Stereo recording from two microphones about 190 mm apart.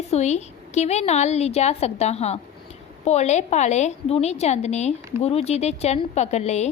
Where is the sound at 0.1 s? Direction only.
35° left (ahead or behind).